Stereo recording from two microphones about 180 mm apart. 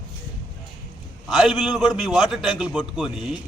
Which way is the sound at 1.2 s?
Centre (ahead or behind).